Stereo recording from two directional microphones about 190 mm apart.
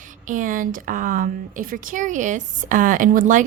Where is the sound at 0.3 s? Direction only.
45° right (ahead or behind).